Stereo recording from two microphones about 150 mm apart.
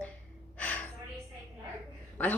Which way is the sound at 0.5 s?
10° left (ahead or behind).